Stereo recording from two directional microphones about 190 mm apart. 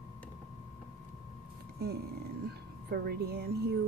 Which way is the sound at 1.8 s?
55° right (ahead or behind).